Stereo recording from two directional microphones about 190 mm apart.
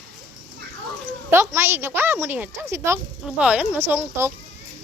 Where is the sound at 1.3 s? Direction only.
15° right (ahead or behind).